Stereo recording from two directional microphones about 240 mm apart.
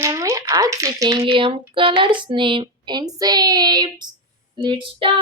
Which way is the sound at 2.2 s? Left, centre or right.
Centre.